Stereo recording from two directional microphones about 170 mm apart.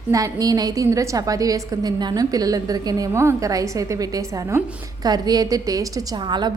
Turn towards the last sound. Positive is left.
turn(degrees=-25)  # may be behind; listen again after turning